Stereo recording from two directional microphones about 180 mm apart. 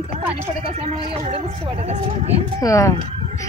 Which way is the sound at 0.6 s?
35° right (ahead or behind).